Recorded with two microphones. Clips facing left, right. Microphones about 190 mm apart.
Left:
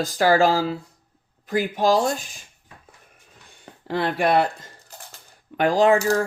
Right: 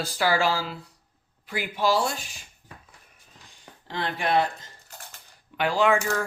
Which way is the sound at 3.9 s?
60° left (ahead or behind).